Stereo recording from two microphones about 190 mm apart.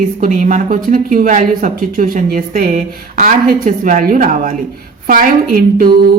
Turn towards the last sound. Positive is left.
turn(degrees=-50)  # may be behind; listen again after turning